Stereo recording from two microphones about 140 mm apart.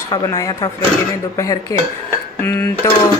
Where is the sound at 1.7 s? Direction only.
25° left (ahead or behind).